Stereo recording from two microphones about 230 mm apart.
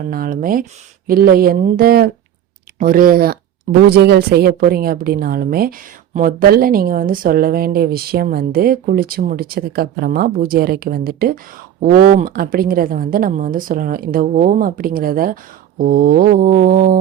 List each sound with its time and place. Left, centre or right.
0.0 s speech: right